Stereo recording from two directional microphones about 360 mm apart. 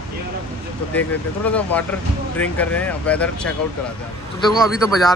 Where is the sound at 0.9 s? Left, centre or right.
Centre.